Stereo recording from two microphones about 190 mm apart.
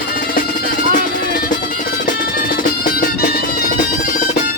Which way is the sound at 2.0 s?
45° left (ahead or behind).